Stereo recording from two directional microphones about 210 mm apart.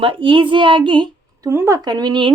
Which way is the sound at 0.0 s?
25° right (ahead or behind).